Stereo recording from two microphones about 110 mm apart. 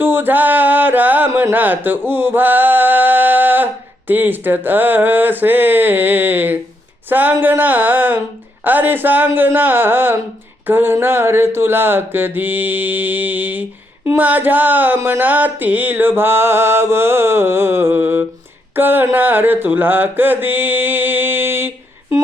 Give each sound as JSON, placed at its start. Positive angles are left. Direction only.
{"t": 0.0, "sound": "a sound", "side_deg": -20}
{"t": 7.1, "sound": "a man's voice", "side_deg": -15}
{"t": 10.7, "sound": "mantra", "side_deg": -20}